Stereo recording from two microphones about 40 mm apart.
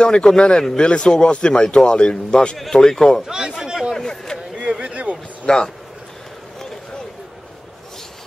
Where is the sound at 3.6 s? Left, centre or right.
Centre.